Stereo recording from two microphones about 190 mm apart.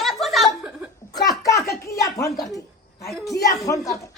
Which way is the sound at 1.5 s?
55° left (ahead or behind).